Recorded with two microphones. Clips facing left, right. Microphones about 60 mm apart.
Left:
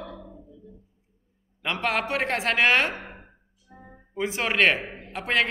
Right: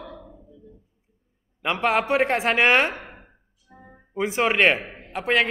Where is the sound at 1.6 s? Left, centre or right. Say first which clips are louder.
Right 4 dB; centre.